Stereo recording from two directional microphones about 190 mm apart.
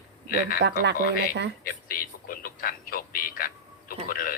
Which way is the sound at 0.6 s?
65° right (ahead or behind).